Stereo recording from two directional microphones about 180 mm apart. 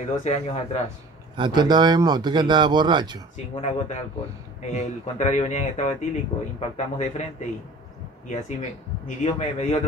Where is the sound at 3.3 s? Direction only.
40° left (ahead or behind).